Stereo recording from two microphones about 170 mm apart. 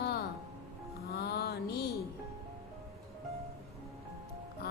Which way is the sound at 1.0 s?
70° left (ahead or behind).